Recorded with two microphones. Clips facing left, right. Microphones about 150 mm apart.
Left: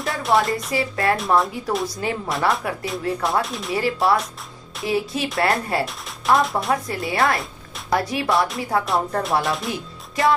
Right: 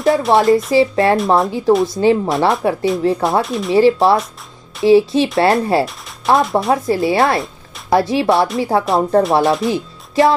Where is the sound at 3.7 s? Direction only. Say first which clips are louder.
Right 9 dB; 25° right (ahead or behind).